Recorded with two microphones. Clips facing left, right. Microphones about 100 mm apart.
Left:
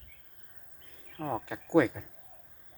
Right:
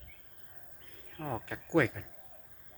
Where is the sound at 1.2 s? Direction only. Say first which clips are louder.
Left 4 dB; 10° left (ahead or behind).